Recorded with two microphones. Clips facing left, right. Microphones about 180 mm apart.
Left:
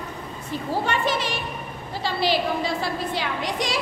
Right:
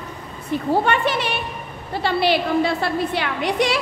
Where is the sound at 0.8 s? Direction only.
60° right (ahead or behind).